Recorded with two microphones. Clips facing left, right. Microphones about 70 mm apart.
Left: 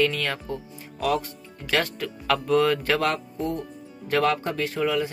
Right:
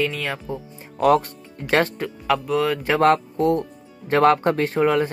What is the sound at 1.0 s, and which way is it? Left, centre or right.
Speech, right.